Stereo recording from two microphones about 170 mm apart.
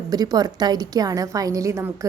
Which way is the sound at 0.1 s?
20° right (ahead or behind).